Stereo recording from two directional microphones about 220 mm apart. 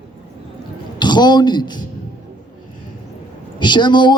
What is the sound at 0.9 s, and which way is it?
Speech, 20° left (ahead or behind).